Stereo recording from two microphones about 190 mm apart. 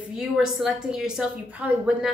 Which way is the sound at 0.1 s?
5° right (ahead or behind).